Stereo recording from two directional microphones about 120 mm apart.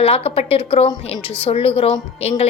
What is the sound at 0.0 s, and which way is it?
A woman's voice, 55° left (ahead or behind).